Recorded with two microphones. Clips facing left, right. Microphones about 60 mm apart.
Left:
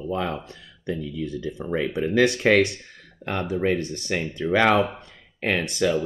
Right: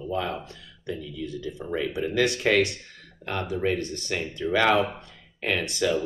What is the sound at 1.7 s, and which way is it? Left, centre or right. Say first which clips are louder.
Speech: left 4 dB; left.